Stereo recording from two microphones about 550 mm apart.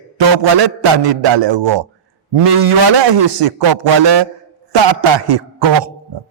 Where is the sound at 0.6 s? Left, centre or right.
Right.